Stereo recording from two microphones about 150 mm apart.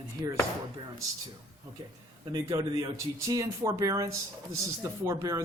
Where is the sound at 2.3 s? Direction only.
20° right (ahead or behind).